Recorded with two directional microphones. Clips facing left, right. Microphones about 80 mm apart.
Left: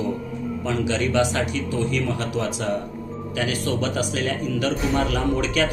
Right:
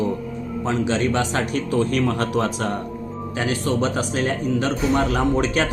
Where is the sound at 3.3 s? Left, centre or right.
Right.